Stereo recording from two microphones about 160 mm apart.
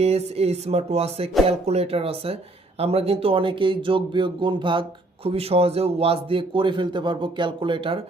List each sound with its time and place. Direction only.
0.0 s speech: 40° right (ahead or behind)